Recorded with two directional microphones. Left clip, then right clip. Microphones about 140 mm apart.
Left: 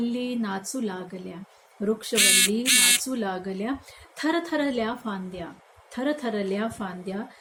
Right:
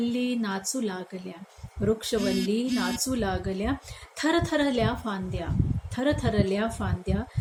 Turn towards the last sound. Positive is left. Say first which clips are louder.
# right 1 dB
turn(degrees=-10)  # may be behind; listen again after turning